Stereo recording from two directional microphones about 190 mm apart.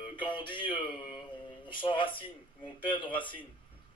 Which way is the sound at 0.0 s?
25° left (ahead or behind).